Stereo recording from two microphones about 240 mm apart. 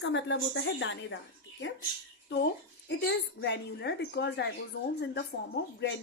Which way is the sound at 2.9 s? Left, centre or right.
Left.